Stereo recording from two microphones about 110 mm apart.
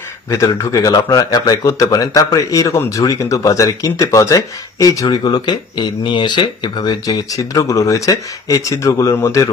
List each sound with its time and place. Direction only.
0.5 s speech: 30° left (ahead or behind)